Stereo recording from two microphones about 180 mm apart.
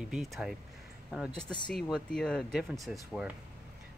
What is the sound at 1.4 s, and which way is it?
Speech, 25° left (ahead or behind).